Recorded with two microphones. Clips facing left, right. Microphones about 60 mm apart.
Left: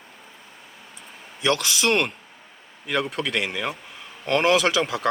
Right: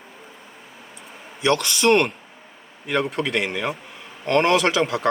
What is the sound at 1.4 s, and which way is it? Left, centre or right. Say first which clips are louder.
Speech: right 3 dB; centre.